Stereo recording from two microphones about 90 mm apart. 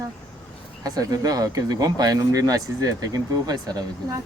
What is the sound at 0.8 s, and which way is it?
Speech, 45° right (ahead or behind).